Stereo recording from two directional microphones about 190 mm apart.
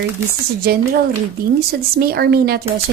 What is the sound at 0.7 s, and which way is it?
A woman's voice, 55° right (ahead or behind).